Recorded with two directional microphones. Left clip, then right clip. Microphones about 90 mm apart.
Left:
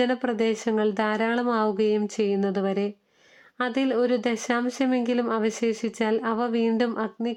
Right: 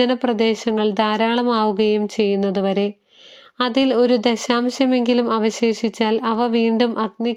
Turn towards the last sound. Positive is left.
turn(degrees=-25)  # may be behind; listen again after turning